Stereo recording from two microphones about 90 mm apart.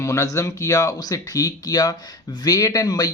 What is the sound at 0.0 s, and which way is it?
A man's voice, 35° left (ahead or behind).